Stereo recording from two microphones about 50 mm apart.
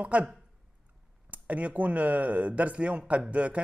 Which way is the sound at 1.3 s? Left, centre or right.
Right.